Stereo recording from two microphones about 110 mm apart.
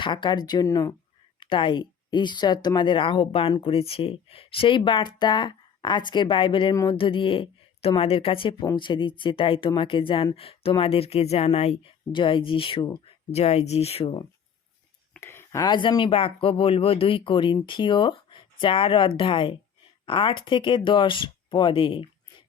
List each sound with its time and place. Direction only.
0.0 s speech: 45° left (ahead or behind)
1.4 s speech: 50° left (ahead or behind); by 11.9 s 70° left (ahead or behind)
12.1 s speech: 50° left (ahead or behind)
13.3 s speech: 75° left (ahead or behind); by 14.3 s 50° left (ahead or behind)
15.2 s a sound: 25° left (ahead or behind)
15.6 s speech: 45° left (ahead or behind)